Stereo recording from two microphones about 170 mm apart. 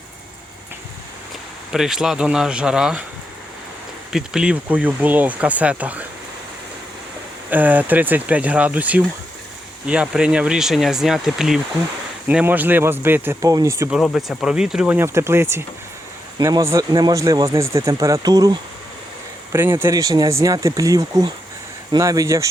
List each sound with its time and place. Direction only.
1.7 s speech: centre (ahead or behind)
4.1 s speech: 5° right (ahead or behind)
7.5 s speech: 10° right (ahead or behind)
13.9 s speech: centre (ahead or behind); by 18.5 s 20° right (ahead or behind)
19.5 s speech: 15° right (ahead or behind)